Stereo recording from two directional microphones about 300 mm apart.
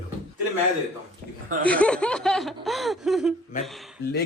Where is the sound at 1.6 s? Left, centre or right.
Centre.